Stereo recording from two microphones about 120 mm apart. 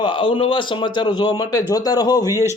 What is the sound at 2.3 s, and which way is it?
Speech, 20° right (ahead or behind).